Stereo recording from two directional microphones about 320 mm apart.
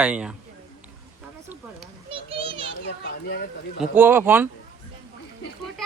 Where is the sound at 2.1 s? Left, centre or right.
Centre.